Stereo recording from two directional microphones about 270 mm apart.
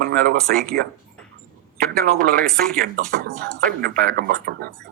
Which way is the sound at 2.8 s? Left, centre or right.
Right.